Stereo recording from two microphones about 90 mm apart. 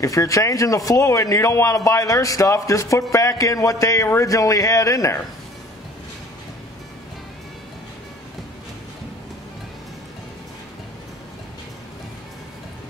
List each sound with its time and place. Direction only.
0.0 s speech: 40° left (ahead or behind)